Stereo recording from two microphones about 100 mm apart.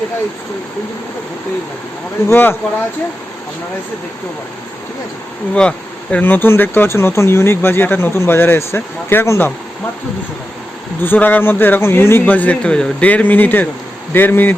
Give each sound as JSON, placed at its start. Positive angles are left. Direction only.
{"t": 2.3, "sound": "speech", "side_deg": 25}
{"t": 5.5, "sound": "speech", "side_deg": 10}
{"t": 11.0, "sound": "speech", "side_deg": 20}